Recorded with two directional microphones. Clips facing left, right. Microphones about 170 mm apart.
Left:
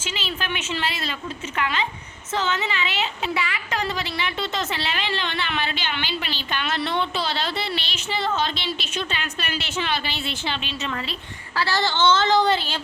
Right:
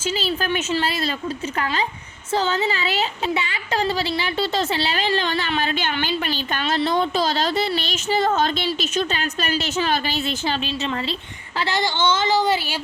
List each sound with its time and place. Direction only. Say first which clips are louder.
0.0 s speech: right 7 dB; 35° right (ahead or behind)
11.5 s a woman's voice: even; 20° right (ahead or behind)